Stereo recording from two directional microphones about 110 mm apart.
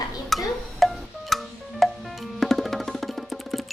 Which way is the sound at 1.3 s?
Centre (ahead or behind).